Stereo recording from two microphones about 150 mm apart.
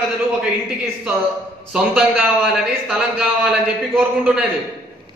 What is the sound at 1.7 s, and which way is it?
A man's voice, 5° right (ahead or behind).